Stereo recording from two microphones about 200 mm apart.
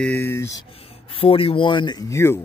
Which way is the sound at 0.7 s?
30° left (ahead or behind).